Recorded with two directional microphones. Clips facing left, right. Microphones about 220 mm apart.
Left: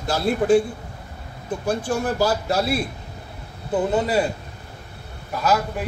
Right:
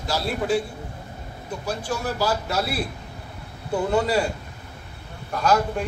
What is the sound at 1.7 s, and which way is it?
Speech, 50° left (ahead or behind).